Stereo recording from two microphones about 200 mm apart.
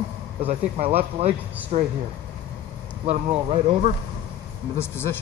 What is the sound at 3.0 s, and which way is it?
Speech, 30° right (ahead or behind).